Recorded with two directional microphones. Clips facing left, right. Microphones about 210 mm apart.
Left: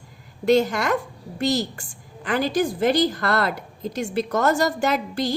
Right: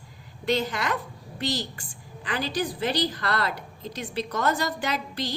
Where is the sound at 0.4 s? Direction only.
45° left (ahead or behind).